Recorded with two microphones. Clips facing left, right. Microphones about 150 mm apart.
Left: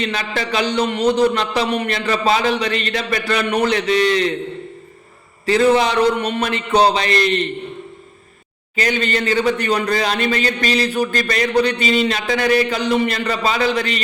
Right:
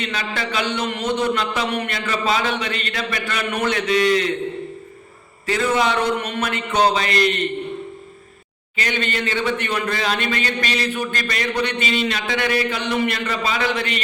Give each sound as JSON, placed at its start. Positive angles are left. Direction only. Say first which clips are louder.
{"t": 0.0, "sound": "a man's voice", "louder": "left 3 dB", "side_deg": 40}
{"t": 5.5, "sound": "a man's voice", "louder": "left 5 dB", "side_deg": 35}
{"t": 8.7, "sound": "a man's voice", "louder": "left 5 dB", "side_deg": 40}